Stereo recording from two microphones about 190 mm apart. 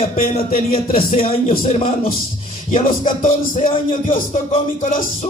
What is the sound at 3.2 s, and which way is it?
Speech, 35° left (ahead or behind).